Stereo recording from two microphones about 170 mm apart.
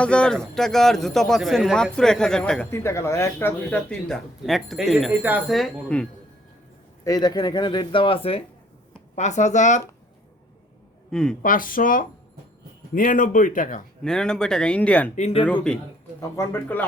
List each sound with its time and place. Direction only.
0.0 s a man's voice: 5° left (ahead or behind)
5.2 s speech: 10° right (ahead or behind)
5.5 s a man's voice: 5° left (ahead or behind)
7.0 s a man's voice: 20° left (ahead or behind); by 9.8 s 45° left (ahead or behind)
11.1 s a woman's voice: 5° left (ahead or behind)
11.4 s speech: 55° left (ahead or behind)
14.0 s a man's voice: 5° left (ahead or behind)
15.1 s speech: 40° left (ahead or behind)
16.3 s speech: 15° left (ahead or behind)